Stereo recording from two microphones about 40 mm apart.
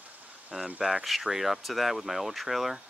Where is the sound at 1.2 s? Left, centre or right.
Centre.